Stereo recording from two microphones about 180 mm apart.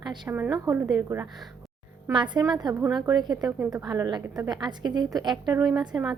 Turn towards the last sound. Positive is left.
turn(degrees=-20)  # may be behind; listen again after turning